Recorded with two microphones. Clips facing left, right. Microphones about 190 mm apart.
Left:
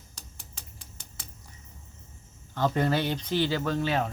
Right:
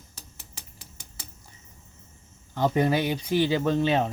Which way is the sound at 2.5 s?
15° right (ahead or behind).